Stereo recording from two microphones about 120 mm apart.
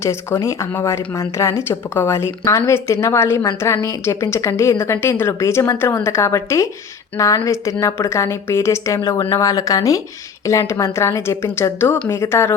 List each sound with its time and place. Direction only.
0.0 s speech: 20° left (ahead or behind)